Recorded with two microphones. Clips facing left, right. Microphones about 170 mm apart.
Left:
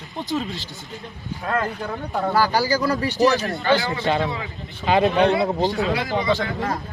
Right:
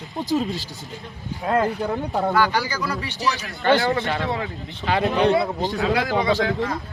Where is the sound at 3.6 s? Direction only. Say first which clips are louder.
Right 6 dB; 50° right (ahead or behind).